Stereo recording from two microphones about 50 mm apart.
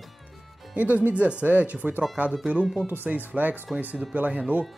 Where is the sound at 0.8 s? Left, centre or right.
Right.